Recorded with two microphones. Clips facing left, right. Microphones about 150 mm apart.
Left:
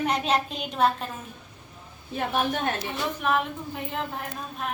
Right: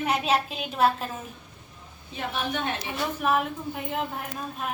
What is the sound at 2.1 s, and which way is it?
Speech, 45° left (ahead or behind).